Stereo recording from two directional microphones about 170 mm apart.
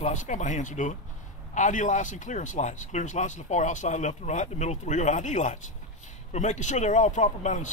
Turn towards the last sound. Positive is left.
turn(degrees=45)  # may be behind; listen again after turning